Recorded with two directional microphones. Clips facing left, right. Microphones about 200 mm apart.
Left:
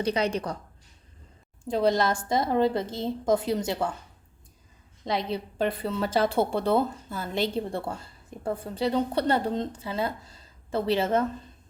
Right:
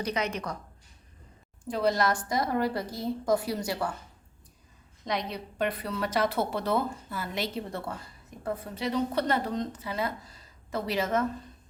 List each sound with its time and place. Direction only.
0.0 s a woman's voice: 30° left (ahead or behind)
1.6 s a woman's voice: 25° left (ahead or behind)
5.0 s a woman's voice: 30° left (ahead or behind)